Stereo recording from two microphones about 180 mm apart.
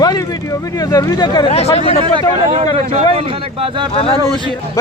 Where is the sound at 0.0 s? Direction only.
20° left (ahead or behind).